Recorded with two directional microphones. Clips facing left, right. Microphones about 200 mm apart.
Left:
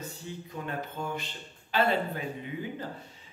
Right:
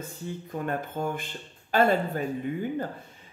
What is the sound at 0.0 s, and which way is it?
Speech, 50° right (ahead or behind).